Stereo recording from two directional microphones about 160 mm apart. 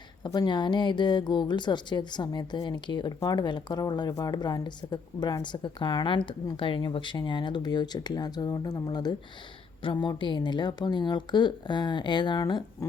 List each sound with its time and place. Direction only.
0.2 s a woman's voice: 25° left (ahead or behind)